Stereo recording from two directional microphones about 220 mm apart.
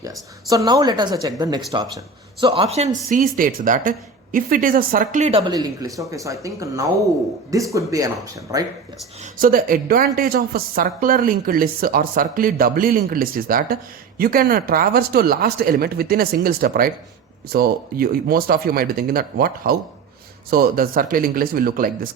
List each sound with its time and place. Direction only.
0.5 s speech: 15° right (ahead or behind); by 5.4 s 35° right (ahead or behind)
5.5 s speech: 15° right (ahead or behind)
9.2 s speech: 40° right (ahead or behind)